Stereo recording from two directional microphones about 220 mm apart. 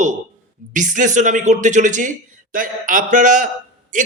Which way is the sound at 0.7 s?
35° right (ahead or behind).